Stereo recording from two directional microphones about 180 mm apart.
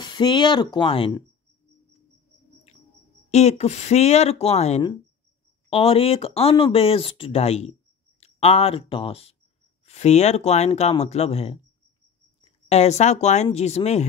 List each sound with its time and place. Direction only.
0.0 s speech: 25° left (ahead or behind)
2.7 s a sound: 35° left (ahead or behind)
3.3 s speech: 35° left (ahead or behind)